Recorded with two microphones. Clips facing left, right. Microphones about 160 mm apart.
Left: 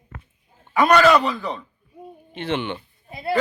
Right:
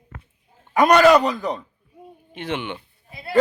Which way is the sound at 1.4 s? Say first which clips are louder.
Right 3 dB; 40° right (ahead or behind).